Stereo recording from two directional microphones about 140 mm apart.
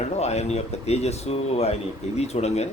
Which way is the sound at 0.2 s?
50° left (ahead or behind).